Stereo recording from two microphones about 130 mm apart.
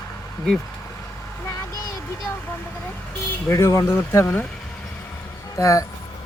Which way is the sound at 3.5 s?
25° left (ahead or behind).